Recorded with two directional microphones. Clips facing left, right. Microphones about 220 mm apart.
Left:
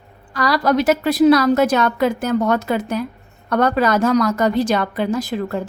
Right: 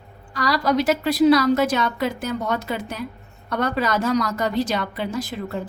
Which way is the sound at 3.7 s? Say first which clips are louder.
Left 3 dB; 45° left (ahead or behind).